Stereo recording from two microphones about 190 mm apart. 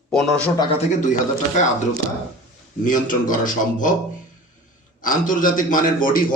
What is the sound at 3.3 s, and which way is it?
Speech, 45° left (ahead or behind).